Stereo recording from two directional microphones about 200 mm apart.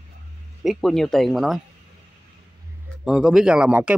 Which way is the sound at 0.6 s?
Centre (ahead or behind).